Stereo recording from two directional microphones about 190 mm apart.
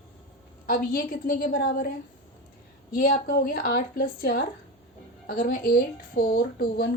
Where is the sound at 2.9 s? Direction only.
50° left (ahead or behind).